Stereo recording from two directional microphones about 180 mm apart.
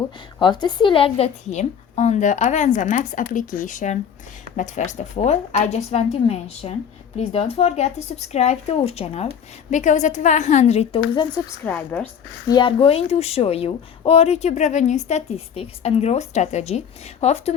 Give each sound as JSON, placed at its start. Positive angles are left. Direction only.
{"t": 0.3, "sound": "a woman's voice", "side_deg": 25}
{"t": 11.6, "sound": "a woman's voice", "side_deg": 10}
{"t": 12.5, "sound": "a woman's voice", "side_deg": 25}